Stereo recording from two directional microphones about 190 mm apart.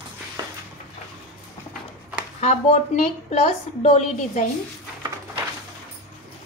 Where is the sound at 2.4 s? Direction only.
35° left (ahead or behind).